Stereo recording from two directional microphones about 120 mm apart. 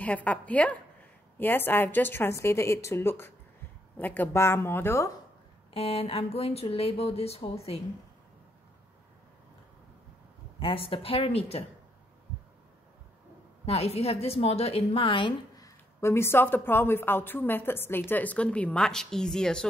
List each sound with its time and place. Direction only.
0.0 s a woman's voice: 10° left (ahead or behind)
5.7 s speech: 55° left (ahead or behind)
10.6 s a woman's voice: 50° left (ahead or behind)
13.7 s speech: 55° left (ahead or behind)
15.5 s speech: 25° left (ahead or behind); by 19.7 s 5° left (ahead or behind)